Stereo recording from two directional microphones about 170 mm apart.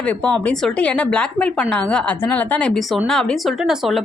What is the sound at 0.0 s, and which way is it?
A woman's voice, 5° left (ahead or behind).